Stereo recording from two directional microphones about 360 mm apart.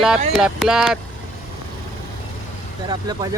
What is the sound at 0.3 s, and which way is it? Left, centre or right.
Speech, centre.